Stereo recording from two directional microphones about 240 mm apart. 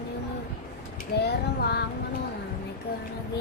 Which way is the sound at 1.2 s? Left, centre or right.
Left.